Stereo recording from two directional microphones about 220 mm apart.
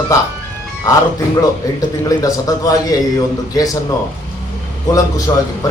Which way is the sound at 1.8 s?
15° left (ahead or behind).